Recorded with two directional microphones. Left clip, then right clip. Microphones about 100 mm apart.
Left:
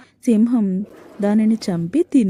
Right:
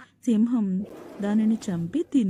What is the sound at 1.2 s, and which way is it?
A woman's voice, 40° left (ahead or behind).